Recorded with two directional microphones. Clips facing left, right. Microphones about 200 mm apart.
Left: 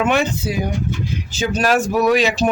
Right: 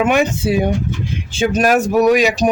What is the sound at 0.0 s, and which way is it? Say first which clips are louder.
Speech: right 3 dB; 15° right (ahead or behind).